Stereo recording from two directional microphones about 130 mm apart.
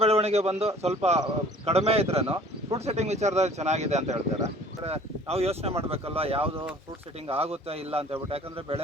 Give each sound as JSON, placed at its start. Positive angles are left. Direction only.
{"t": 0.0, "sound": "a man's voice", "side_deg": -50}
{"t": 4.8, "sound": "speech", "side_deg": -50}